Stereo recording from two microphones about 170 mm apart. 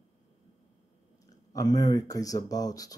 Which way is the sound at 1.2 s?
20° left (ahead or behind).